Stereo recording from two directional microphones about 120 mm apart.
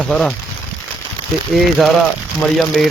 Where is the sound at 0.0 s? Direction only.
Centre (ahead or behind).